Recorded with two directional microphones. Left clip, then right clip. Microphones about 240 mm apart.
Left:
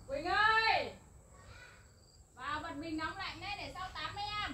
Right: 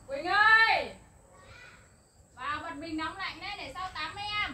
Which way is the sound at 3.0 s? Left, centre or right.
Centre.